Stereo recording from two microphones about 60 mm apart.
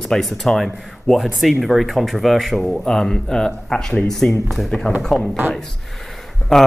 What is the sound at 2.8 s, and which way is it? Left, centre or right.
Speech, centre.